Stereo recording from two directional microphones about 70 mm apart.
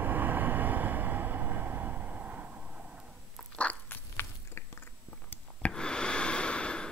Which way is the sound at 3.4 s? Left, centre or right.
Centre.